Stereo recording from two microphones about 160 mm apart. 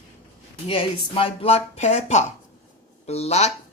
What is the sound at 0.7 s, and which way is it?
Speech, 35° left (ahead or behind).